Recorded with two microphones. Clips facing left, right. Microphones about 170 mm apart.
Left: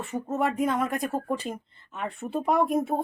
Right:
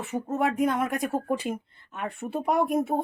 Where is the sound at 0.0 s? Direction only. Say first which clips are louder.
Right 1 dB; 5° right (ahead or behind).